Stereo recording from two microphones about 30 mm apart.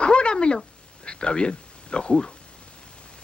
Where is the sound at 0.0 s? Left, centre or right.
Left.